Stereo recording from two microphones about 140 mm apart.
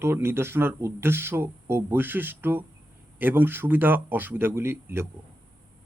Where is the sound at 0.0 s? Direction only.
15° right (ahead or behind).